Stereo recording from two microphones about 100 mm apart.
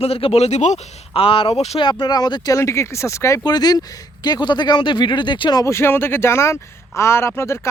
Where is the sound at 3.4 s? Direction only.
45° left (ahead or behind).